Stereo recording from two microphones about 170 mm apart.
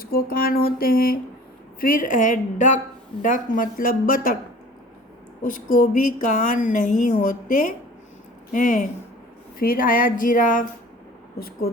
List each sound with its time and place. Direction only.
0.0 s music: 60° left (ahead or behind)
1.8 s a woman's voice: 55° left (ahead or behind)
5.4 s a woman's voice: 50° left (ahead or behind)